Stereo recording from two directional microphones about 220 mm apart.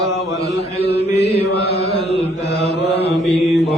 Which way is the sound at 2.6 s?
50° left (ahead or behind).